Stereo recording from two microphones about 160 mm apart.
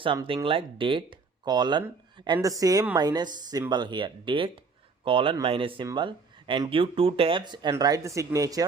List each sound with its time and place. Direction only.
0.4 s speech: 35° right (ahead or behind)